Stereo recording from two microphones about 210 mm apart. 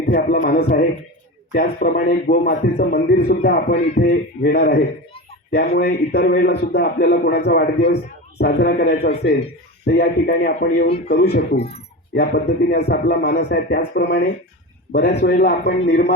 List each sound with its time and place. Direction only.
0.1 s a man's voice: 40° left (ahead or behind)